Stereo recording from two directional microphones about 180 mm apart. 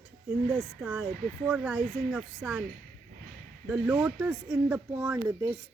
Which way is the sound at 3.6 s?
10° right (ahead or behind).